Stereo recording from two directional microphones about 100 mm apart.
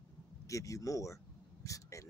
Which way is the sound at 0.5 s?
35° left (ahead or behind).